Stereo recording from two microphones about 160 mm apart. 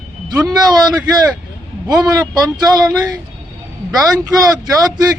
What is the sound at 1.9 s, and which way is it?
A man's voice, 25° right (ahead or behind).